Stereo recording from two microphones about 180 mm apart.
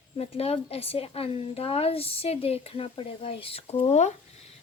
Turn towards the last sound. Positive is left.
turn(degrees=35)  # may be behind; listen again after turning